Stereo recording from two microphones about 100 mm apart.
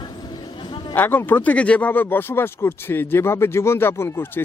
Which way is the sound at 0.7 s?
55° left (ahead or behind).